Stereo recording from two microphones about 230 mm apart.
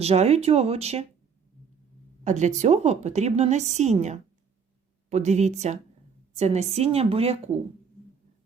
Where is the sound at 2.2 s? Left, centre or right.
Right.